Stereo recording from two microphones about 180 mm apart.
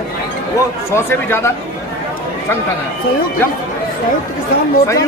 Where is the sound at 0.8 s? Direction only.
15° left (ahead or behind).